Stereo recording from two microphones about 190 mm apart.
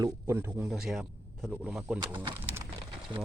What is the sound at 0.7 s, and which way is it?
Speech, centre (ahead or behind).